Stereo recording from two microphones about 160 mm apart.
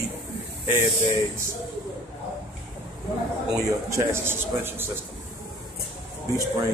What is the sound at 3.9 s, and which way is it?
Speech, 15° right (ahead or behind).